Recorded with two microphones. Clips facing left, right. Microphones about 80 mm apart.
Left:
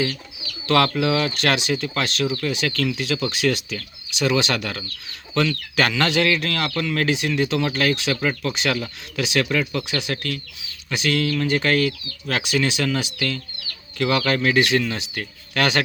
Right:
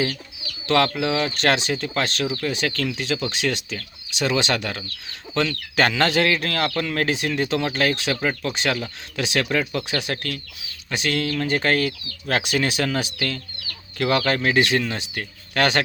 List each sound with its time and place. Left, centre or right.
0.7 s speech: right
1.4 s speech: right
8.2 s speech: right